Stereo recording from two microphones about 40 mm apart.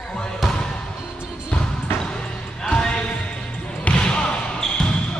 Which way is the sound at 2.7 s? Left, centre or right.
Left.